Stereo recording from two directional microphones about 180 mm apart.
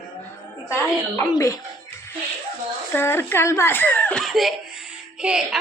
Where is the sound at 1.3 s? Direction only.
15° left (ahead or behind).